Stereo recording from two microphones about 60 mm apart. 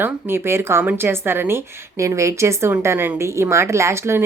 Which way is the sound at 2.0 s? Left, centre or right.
Right.